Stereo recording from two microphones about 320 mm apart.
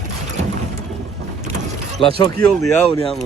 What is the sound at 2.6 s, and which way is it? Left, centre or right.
Speech, centre.